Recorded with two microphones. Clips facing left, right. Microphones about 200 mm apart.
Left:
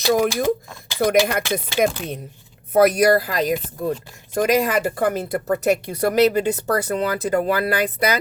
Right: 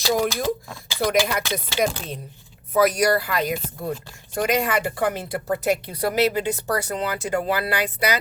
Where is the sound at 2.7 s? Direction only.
60° left (ahead or behind).